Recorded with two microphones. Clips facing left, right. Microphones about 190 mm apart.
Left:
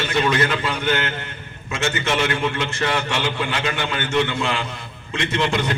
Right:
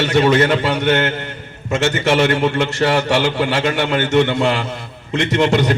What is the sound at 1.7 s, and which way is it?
A man's voice, 40° right (ahead or behind).